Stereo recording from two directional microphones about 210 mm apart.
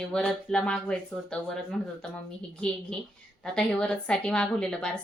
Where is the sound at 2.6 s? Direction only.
5° left (ahead or behind).